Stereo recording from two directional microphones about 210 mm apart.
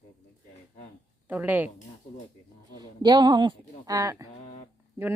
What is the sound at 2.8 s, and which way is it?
A woman's voice, 20° right (ahead or behind).